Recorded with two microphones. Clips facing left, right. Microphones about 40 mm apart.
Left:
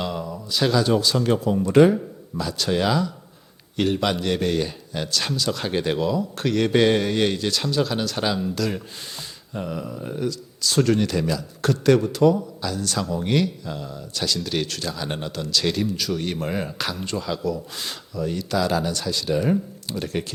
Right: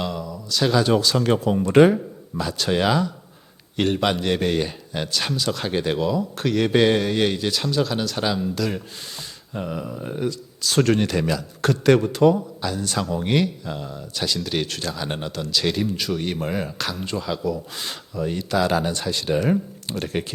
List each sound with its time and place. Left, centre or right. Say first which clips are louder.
0.1 s speech: even; centre
0.9 s speech: right 1 dB; right
1.6 s speech: right 1 dB; right
3.8 s a man's voice: right 1 dB; right
5.5 s speech: even; centre; by 10.7 s right
10.8 s speech: right 1 dB; right
11.9 s a man's voice: right 1 dB; right; by 16.2 s centre
16.2 s speech: right 1 dB; centre
18.1 s a man's voice: right 1 dB; right